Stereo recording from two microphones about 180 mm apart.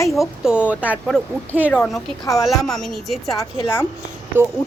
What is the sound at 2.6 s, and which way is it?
Speech, centre (ahead or behind).